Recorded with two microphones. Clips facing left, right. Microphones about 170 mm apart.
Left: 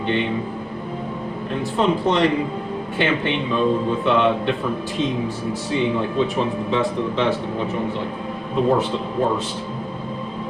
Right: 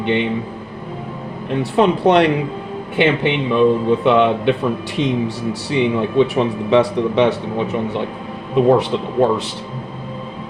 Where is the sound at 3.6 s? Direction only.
65° right (ahead or behind).